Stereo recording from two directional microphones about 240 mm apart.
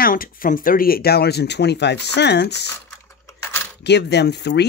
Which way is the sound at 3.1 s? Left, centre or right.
Centre.